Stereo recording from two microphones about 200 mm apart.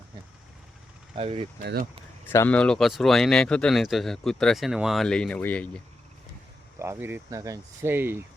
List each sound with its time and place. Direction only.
1.1 s speech: 30° right (ahead or behind)
1.6 s speech: 50° right (ahead or behind)
2.3 s speech: 10° left (ahead or behind)
6.7 s speech: 15° right (ahead or behind)